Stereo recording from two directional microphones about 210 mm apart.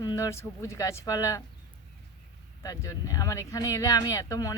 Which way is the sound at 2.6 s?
15° left (ahead or behind).